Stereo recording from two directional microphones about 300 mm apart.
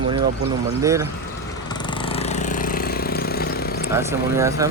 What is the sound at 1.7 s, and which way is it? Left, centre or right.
Vehicle, centre.